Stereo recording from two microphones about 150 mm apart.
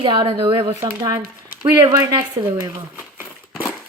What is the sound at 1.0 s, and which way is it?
A woman's voice, 20° right (ahead or behind).